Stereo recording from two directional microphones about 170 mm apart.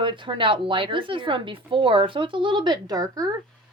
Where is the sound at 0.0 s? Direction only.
30° right (ahead or behind).